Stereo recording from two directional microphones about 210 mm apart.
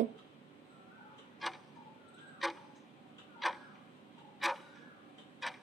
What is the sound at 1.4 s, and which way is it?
Tick-tock, centre (ahead or behind).